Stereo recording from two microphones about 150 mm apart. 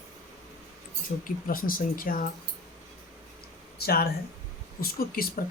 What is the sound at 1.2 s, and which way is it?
Speech, 65° left (ahead or behind).